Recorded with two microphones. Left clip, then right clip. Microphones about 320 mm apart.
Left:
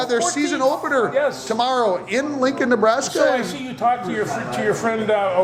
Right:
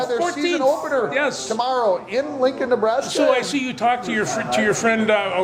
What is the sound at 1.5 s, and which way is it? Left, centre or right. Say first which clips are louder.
A man's voice: even; left.